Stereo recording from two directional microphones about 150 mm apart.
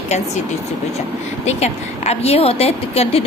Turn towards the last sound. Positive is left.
turn(degrees=40)  # may be behind; listen again after turning